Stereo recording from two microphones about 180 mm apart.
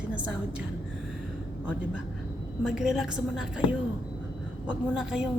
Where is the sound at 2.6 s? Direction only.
5° right (ahead or behind).